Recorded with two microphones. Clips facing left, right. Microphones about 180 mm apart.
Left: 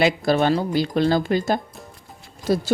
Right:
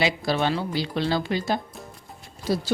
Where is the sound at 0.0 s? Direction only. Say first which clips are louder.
Left 5 dB; 50° left (ahead or behind).